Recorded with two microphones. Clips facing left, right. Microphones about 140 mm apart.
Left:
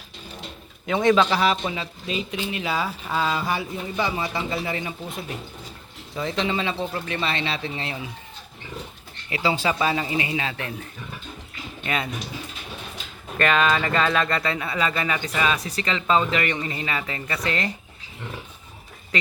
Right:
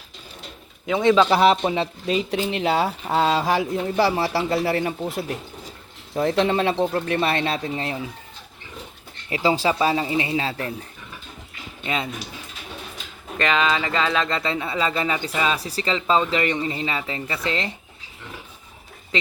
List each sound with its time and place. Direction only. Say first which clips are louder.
0.9 s a man's voice: right 1 dB; 15° right (ahead or behind)
1.1 s a man's voice: right 7 dB; 30° right (ahead or behind)
2.6 s speech: right 5 dB; 65° right (ahead or behind)
6.1 s speech: right 6 dB; 60° right (ahead or behind); by 7.9 s 40° right (ahead or behind)
9.3 s a man's voice: right 3 dB; 40° right (ahead or behind)
9.8 s a man's voice: right 3 dB; 25° right (ahead or behind)
11.8 s speech: right 1 dB; 20° right (ahead or behind)
13.3 s speech: left 1 dB; 20° right (ahead or behind)
19.1 s speech: right 1 dB; 25° right (ahead or behind)